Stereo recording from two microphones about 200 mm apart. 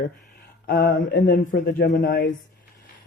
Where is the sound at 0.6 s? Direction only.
50° left (ahead or behind).